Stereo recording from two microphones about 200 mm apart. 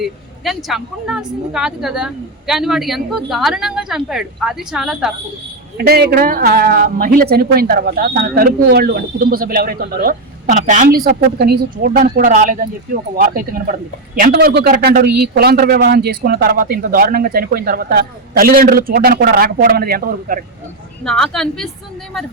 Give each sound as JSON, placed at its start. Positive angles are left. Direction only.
{"t": 0.0, "sound": "a woman's voice", "side_deg": 0}
{"t": 5.7, "sound": "speech", "side_deg": -50}
{"t": 14.3, "sound": "speech", "side_deg": -55}
{"t": 21.0, "sound": "a woman's voice", "side_deg": 0}